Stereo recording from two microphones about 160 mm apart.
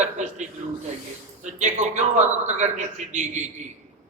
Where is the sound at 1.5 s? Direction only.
50° right (ahead or behind).